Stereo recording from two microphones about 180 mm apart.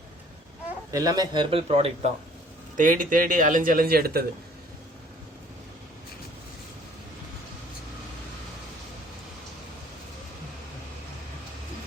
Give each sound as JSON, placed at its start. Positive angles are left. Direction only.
{"t": 0.9, "sound": "a man's voice", "side_deg": -20}
{"t": 2.7, "sound": "a man's voice", "side_deg": -50}